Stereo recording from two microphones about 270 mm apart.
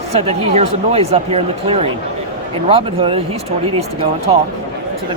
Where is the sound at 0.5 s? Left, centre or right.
Right.